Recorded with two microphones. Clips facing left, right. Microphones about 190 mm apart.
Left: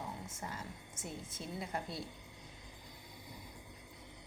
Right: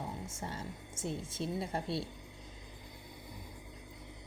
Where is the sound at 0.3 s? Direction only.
30° right (ahead or behind).